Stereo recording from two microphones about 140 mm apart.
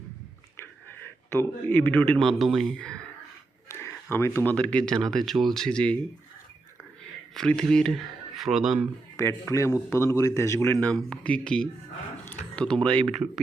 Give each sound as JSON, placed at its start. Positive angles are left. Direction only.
{"t": 0.5, "sound": "speech", "side_deg": 15}
{"t": 3.7, "sound": "speech", "side_deg": 20}
{"t": 7.3, "sound": "speech", "side_deg": 5}
{"t": 9.1, "sound": "a man's voice", "side_deg": 20}